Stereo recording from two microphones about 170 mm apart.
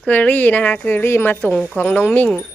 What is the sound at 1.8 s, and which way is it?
Speech, 10° left (ahead or behind).